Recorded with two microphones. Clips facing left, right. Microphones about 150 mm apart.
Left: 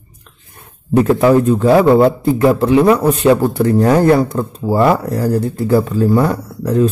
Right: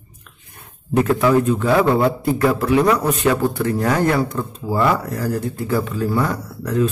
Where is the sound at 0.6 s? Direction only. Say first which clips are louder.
Left 5 dB; 30° left (ahead or behind).